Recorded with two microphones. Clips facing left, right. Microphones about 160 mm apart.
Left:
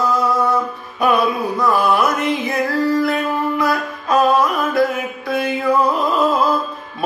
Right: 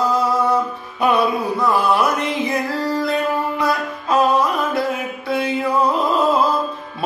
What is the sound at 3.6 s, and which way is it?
Music, 30° right (ahead or behind).